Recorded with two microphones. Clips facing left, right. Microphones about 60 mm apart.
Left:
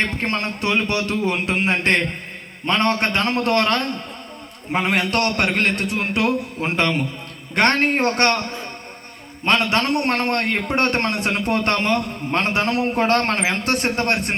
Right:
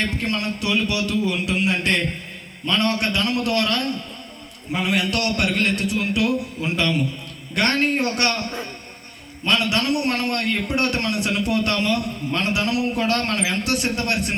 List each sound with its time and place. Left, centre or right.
0.0 s a man's voice: left